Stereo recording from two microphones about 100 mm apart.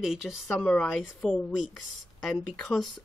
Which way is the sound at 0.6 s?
15° left (ahead or behind).